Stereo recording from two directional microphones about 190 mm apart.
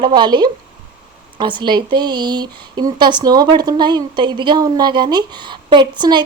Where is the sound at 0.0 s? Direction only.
20° right (ahead or behind).